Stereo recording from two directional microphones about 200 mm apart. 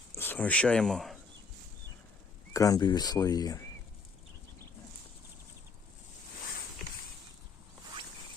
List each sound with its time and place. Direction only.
0.1 s speech: 10° left (ahead or behind)
2.5 s speech: 15° left (ahead or behind)